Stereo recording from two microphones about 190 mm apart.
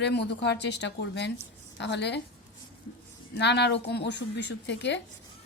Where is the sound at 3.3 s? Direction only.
65° left (ahead or behind).